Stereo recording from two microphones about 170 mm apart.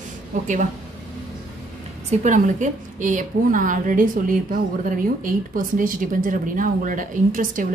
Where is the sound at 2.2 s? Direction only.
45° right (ahead or behind).